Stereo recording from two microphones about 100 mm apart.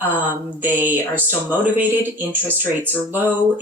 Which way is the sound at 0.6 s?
20° right (ahead or behind).